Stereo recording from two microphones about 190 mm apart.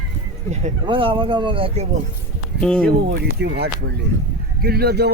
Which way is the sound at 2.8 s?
55° right (ahead or behind).